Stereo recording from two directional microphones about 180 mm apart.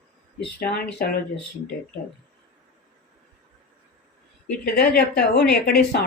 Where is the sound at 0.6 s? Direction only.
55° left (ahead or behind).